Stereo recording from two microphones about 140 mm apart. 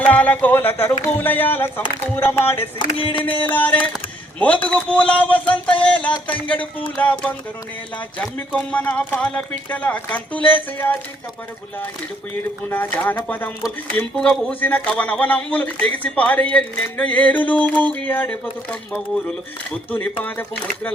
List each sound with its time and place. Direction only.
0.0 s speech: 10° left (ahead or behind)
2.7 s a sound: 40° left (ahead or behind)
3.5 s speech: 10° left (ahead or behind)
12.7 s speech: 15° left (ahead or behind)
20.2 s speech: 10° left (ahead or behind)